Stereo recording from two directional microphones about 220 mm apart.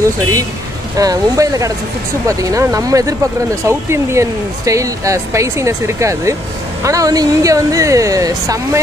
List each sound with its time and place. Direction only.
0.9 s speech: 15° right (ahead or behind)